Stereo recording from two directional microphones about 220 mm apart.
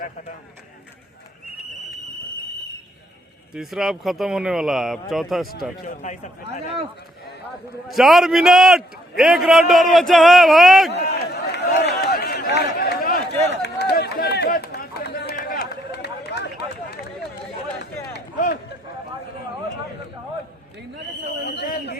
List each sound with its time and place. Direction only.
3.5 s a man's voice: centre (ahead or behind)
5.8 s speech: 35° left (ahead or behind)
7.9 s a man's voice: centre (ahead or behind)
10.9 s a sound: 50° left (ahead or behind)
13.6 s run: 50° left (ahead or behind)
21.2 s a sound: 50° left (ahead or behind)